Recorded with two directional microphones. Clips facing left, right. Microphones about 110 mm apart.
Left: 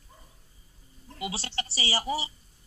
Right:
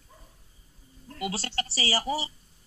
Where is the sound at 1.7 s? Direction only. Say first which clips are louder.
Right 2 dB; 35° right (ahead or behind).